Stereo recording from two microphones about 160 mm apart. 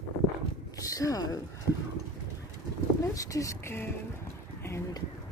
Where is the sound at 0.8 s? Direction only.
20° left (ahead or behind).